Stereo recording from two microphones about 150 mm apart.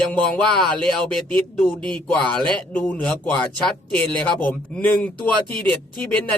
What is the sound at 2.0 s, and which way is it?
A man's voice, 10° left (ahead or behind).